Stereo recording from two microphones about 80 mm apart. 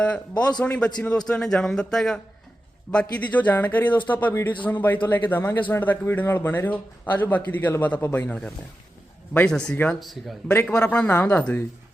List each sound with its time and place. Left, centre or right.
0.0 s a man's voice: centre
9.3 s speech: centre
10.0 s speech: centre
10.5 s a man's voice: left